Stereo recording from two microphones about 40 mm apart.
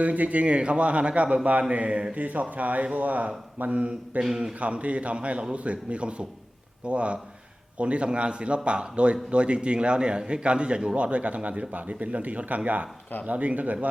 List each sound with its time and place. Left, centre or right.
0.0 s a man's voice: right
4.2 s a man's voice: centre
4.6 s a man's voice: right
11.7 s a man's voice: right